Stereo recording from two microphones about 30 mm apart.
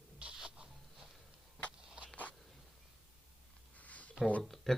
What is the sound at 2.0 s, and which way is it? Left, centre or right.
Biting, right.